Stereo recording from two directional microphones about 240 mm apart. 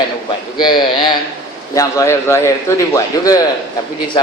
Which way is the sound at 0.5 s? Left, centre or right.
Centre.